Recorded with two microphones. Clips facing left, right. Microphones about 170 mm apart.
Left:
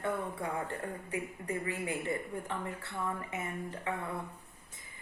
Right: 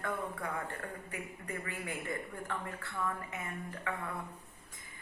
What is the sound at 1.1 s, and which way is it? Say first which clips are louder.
Speech: left 6 dB; 25° left (ahead or behind).